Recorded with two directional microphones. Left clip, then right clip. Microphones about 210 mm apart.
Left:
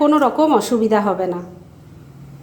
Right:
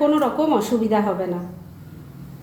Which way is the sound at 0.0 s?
35° left (ahead or behind).